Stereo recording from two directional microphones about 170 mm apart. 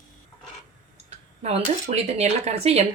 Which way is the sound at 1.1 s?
40° right (ahead or behind).